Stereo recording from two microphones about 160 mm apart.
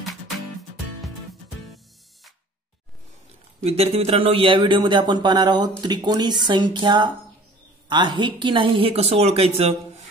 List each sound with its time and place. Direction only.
3.6 s a woman's voice: 40° right (ahead or behind)